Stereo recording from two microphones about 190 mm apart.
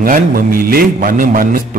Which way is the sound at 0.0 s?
50° right (ahead or behind).